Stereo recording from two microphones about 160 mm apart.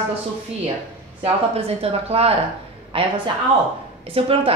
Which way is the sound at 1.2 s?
40° right (ahead or behind).